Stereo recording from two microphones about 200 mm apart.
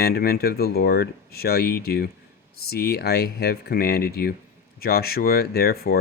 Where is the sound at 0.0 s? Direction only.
50° left (ahead or behind).